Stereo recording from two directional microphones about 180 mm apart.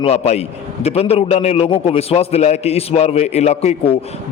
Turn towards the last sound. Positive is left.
turn(degrees=35)  # may be behind; listen again after turning